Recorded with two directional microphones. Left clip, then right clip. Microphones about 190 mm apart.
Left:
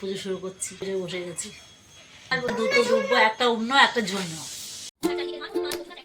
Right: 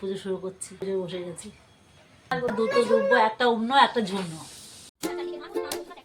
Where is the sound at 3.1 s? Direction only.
10° right (ahead or behind).